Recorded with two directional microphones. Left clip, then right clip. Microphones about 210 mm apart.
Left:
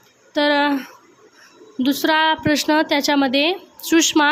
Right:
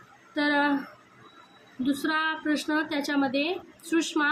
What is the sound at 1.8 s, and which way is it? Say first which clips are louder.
A woman's voice: left 10 dB; 50° left (ahead or behind).